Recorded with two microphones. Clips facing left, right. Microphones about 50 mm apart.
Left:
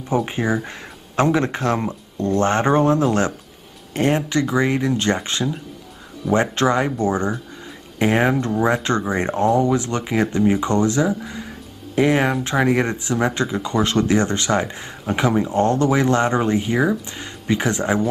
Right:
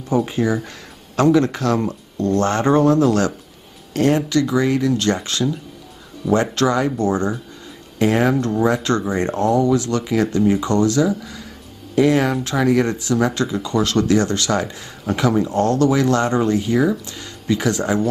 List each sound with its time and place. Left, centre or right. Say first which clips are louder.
0.1 s speech: right 2 dB; left